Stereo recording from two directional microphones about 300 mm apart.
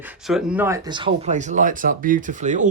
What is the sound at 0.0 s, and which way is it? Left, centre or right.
Speech, centre.